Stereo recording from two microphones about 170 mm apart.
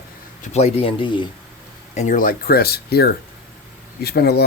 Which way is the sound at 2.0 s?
50° left (ahead or behind).